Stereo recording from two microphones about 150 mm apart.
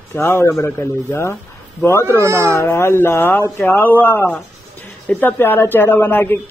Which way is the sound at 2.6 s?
15° left (ahead or behind).